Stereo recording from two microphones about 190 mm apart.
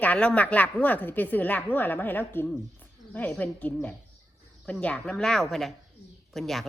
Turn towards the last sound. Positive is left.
turn(degrees=0)  # may be behind; listen again after turning